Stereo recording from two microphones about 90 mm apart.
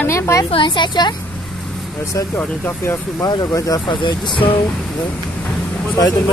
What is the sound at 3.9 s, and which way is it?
Speech, 60° left (ahead or behind).